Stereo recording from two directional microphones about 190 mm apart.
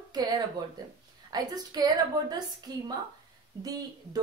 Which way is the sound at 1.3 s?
20° right (ahead or behind).